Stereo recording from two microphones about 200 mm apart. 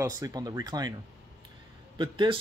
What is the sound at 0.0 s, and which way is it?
Speech, 20° right (ahead or behind).